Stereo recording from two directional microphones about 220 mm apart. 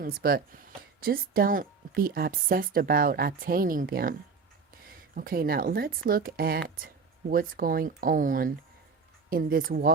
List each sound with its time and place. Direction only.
0.0 s speech: 40° right (ahead or behind)
5.1 s speech: 40° right (ahead or behind)